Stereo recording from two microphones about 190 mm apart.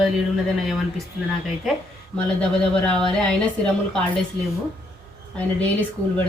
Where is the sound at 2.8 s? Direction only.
5° left (ahead or behind).